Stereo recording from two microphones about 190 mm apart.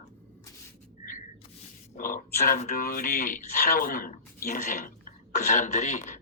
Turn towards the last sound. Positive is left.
turn(degrees=40)  # may be behind; listen again after turning